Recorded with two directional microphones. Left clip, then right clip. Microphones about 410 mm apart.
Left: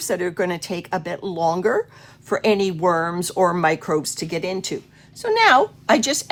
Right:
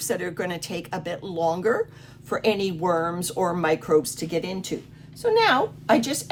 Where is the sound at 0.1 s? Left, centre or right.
Centre.